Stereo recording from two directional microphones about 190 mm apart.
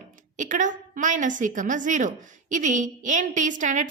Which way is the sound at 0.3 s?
40° right (ahead or behind).